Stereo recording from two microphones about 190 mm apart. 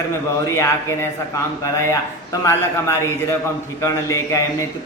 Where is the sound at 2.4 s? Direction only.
15° left (ahead or behind).